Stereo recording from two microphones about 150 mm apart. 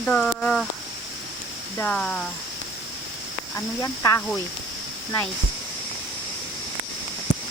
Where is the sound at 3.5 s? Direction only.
20° left (ahead or behind).